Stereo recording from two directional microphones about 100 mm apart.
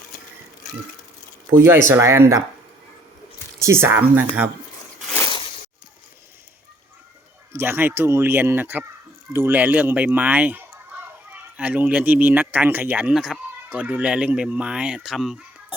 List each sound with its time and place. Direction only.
1.5 s speech: 25° right (ahead or behind)
3.6 s speech: 25° right (ahead or behind)
7.5 s speech: 25° right (ahead or behind)
13.1 s speech: centre (ahead or behind)
13.7 s speech: 15° right (ahead or behind)